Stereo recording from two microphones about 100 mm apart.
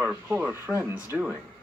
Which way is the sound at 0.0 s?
10° right (ahead or behind).